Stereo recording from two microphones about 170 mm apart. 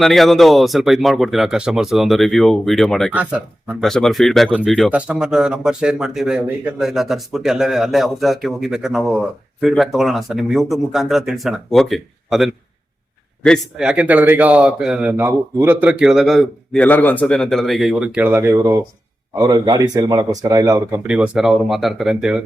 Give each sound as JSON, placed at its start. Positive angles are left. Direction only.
{"t": 0.0, "sound": "speech", "side_deg": 0}
{"t": 3.1, "sound": "a man's voice", "side_deg": -10}
{"t": 16.8, "sound": "speech", "side_deg": 10}
{"t": 21.1, "sound": "speech", "side_deg": -5}